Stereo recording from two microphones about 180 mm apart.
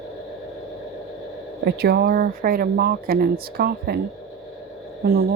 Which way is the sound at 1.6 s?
60° right (ahead or behind).